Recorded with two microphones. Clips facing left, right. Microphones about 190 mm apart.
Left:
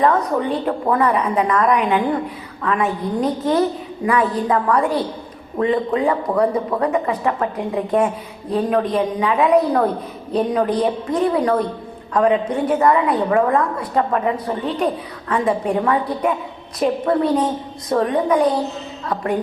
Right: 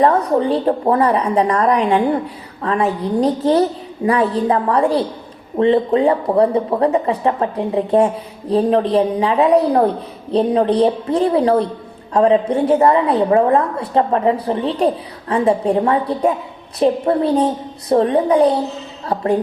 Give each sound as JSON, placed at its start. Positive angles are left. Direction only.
{"t": 0.0, "sound": "a woman's voice", "side_deg": -30}